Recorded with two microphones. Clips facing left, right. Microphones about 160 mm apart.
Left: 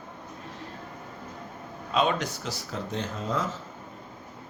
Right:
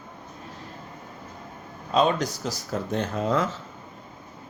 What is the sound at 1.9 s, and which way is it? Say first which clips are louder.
Speech: right 4 dB; 35° right (ahead or behind).